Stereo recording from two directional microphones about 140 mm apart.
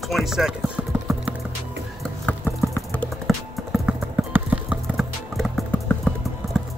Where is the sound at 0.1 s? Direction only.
Centre (ahead or behind).